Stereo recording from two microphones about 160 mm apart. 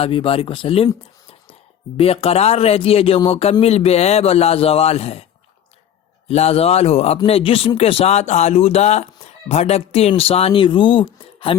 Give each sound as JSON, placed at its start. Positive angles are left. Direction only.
{"t": 0.0, "sound": "speech", "side_deg": 35}
{"t": 2.0, "sound": "speech", "side_deg": 40}
{"t": 6.2, "sound": "speech", "side_deg": 40}